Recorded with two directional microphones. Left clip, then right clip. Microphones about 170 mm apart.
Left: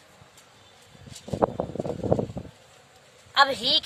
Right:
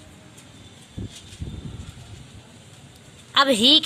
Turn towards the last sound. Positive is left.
turn(degrees=-20)  # may be behind; listen again after turning